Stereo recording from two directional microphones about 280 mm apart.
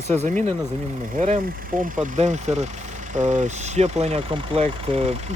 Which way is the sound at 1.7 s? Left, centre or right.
Right.